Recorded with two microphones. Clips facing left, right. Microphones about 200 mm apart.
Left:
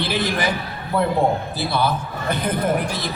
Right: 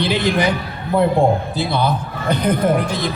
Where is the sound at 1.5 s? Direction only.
20° right (ahead or behind).